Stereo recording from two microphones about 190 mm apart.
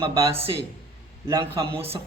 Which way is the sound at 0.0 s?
30° right (ahead or behind).